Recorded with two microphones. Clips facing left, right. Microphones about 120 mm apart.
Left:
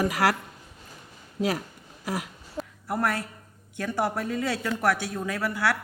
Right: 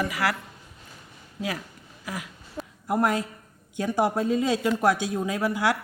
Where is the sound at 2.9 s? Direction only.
15° right (ahead or behind).